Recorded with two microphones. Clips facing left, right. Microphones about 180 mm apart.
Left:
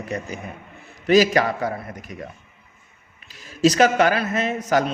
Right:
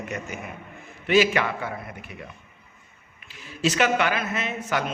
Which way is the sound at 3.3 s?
40° left (ahead or behind).